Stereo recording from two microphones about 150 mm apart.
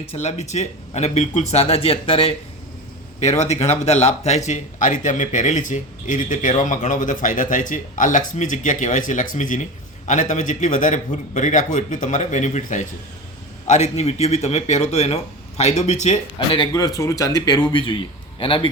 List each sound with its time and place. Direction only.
0.1 s a man's voice: 45° left (ahead or behind)
16.5 s speech: 30° left (ahead or behind)